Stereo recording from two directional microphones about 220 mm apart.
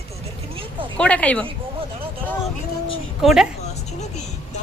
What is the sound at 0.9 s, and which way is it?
Speech, 5° left (ahead or behind).